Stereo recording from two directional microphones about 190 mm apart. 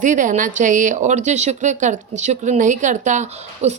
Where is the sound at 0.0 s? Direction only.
40° right (ahead or behind).